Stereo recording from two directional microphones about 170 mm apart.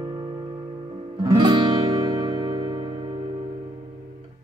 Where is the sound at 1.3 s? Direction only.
25° right (ahead or behind).